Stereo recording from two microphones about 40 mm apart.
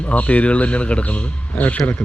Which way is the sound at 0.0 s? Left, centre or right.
Left.